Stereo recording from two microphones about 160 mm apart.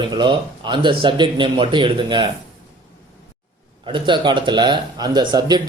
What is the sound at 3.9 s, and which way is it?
Speech, 30° right (ahead or behind).